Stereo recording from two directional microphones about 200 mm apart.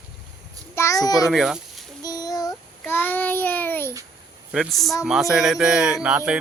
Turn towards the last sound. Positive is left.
turn(degrees=-5)  # may be behind; listen again after turning